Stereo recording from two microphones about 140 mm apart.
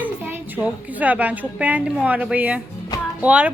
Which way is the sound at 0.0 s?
15° right (ahead or behind).